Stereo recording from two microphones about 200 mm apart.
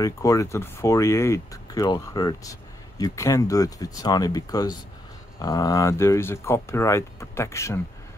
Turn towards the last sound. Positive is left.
turn(degrees=15)  # may be behind; listen again after turning